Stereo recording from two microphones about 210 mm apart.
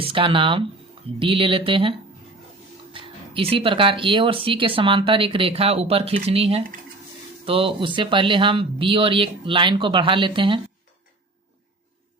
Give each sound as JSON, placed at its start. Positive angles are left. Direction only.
{"t": 0.0, "sound": "speech", "side_deg": -25}